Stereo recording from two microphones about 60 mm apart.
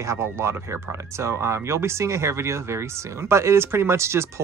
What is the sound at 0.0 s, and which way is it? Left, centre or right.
Speech, right.